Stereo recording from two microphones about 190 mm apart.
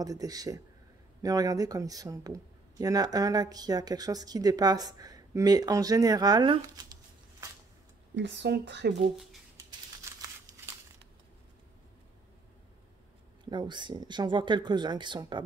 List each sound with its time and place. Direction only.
0.0 s speech: 20° right (ahead or behind)
8.2 s speech: 70° right (ahead or behind)
10.1 s crumpling: 15° right (ahead or behind)
13.5 s speech: 25° right (ahead or behind)